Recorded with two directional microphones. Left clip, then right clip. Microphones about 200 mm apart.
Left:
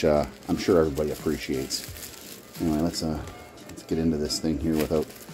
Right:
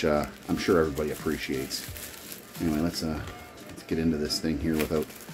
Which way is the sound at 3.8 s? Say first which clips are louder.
Left 2 dB; 15° left (ahead or behind).